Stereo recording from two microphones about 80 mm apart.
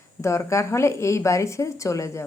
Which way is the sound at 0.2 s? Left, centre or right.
Left.